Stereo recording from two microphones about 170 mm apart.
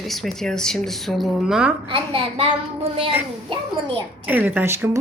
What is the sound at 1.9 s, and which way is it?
Speech, 35° right (ahead or behind).